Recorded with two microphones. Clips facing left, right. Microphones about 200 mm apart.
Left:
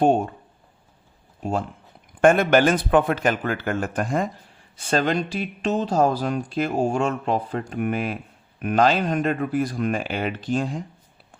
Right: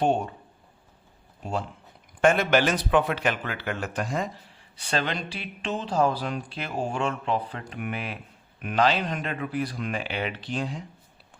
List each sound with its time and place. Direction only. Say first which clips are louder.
0.0 s speech: left 5 dB; 50° left (ahead or behind)
1.4 s speech: left 5 dB; 50° left (ahead or behind)